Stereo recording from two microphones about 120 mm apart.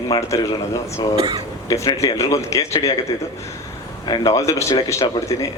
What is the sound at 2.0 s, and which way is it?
Speech, 25° left (ahead or behind).